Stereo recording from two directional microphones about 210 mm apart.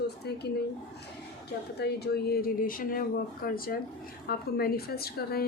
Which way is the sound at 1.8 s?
50° left (ahead or behind).